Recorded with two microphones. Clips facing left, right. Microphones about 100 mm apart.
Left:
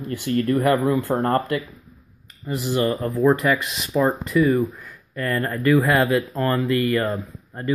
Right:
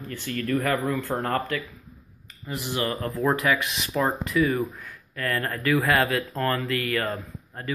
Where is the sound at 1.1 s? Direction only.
30° left (ahead or behind).